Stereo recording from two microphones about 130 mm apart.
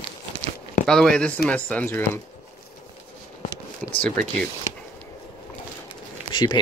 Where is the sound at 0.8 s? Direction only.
5° left (ahead or behind).